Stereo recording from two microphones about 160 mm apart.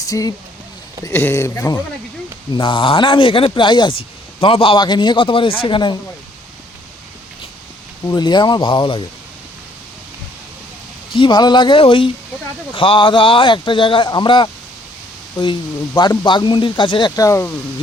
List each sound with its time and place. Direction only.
0.0 s speech: 20° left (ahead or behind)
2.5 s speech: 30° left (ahead or behind)
8.0 s speech: 25° left (ahead or behind)
11.1 s speech: 30° left (ahead or behind)
16.0 s speech: 30° left (ahead or behind)
17.2 s speech: 15° left (ahead or behind)